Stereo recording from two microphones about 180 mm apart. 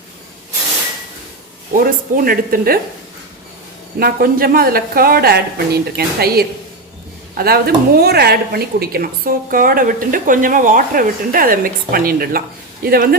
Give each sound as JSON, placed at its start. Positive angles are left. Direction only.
{"t": 1.7, "sound": "a woman's voice", "side_deg": -55}
{"t": 4.0, "sound": "a woman's voice", "side_deg": -55}